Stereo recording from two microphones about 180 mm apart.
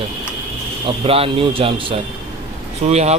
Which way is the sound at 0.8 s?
30° right (ahead or behind).